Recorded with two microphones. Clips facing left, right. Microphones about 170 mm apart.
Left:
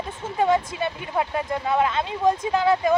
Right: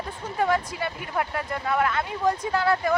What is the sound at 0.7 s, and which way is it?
Speech, 20° left (ahead or behind).